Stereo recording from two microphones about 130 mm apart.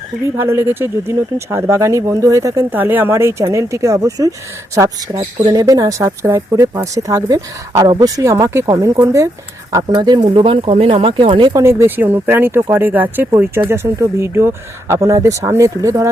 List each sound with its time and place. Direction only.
0.3 s speech: 20° right (ahead or behind); by 10.2 s 35° right (ahead or behind)
10.2 s speech: 45° right (ahead or behind)
11.6 s speech: 20° right (ahead or behind)